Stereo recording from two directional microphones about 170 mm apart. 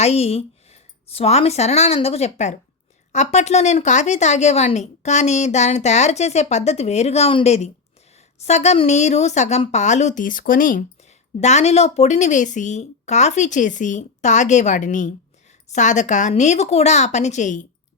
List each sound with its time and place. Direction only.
0.0 s a woman's voice: 35° left (ahead or behind); by 10.8 s 55° left (ahead or behind)
11.3 s a woman's voice: 40° left (ahead or behind)